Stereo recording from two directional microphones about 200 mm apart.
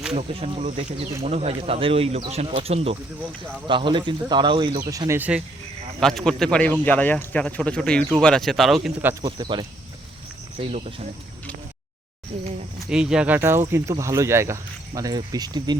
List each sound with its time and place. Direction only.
0.1 s speech: 30° right (ahead or behind); by 5.4 s 10° right (ahead or behind)
6.0 s a man's voice: centre (ahead or behind)
9.2 s speech: 25° right (ahead or behind)
12.9 s speech: 5° right (ahead or behind); by 15.7 s 20° right (ahead or behind)